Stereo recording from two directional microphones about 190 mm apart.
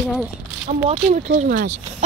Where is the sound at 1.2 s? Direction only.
45° right (ahead or behind).